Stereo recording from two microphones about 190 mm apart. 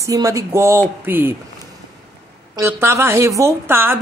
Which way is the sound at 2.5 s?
15° right (ahead or behind).